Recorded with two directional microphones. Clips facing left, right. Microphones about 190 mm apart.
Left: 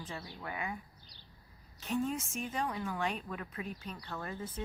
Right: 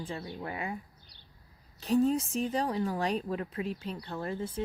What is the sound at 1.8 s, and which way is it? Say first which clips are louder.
Speech: right 8 dB; 35° right (ahead or behind).